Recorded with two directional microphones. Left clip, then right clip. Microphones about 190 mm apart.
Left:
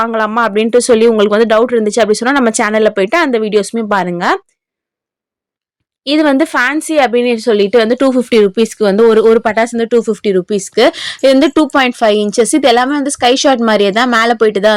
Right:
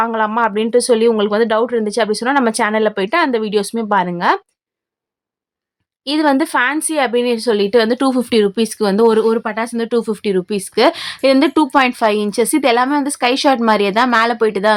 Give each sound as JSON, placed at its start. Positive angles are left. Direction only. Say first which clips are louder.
{"t": 0.0, "sound": "a woman's voice", "louder": "left 3 dB", "side_deg": 20}
{"t": 6.1, "sound": "a woman's voice", "louder": "left 4 dB", "side_deg": 25}